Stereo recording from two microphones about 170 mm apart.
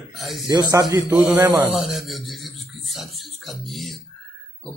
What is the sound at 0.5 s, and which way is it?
A man's voice, 20° right (ahead or behind).